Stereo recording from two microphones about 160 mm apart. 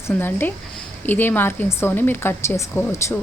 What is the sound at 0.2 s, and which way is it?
Speech, 10° left (ahead or behind).